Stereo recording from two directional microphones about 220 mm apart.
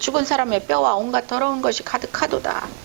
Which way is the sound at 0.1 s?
20° right (ahead or behind).